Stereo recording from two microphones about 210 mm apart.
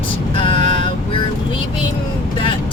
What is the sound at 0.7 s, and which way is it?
Vehicle, 25° left (ahead or behind).